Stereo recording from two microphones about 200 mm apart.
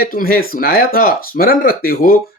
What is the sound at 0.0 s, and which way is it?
Speech, 45° left (ahead or behind).